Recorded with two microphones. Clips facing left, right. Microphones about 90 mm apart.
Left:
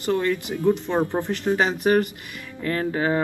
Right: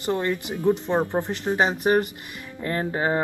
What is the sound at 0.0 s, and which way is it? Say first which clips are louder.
Speech: left 2 dB; 25° right (ahead or behind).